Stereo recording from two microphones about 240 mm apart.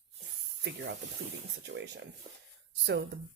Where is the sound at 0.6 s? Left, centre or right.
Right.